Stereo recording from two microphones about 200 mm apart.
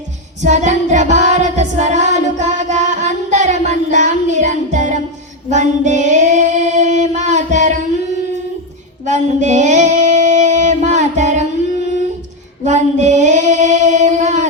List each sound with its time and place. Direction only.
0.4 s music: 35° right (ahead or behind)
5.5 s female singing: 35° right (ahead or behind)
9.0 s a sound: 35° right (ahead or behind)
12.6 s female singing: 35° right (ahead or behind)